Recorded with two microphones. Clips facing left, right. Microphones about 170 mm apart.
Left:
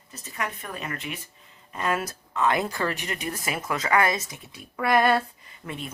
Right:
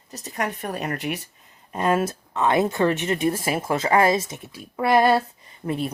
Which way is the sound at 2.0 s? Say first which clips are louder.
Right 2 dB; 25° right (ahead or behind).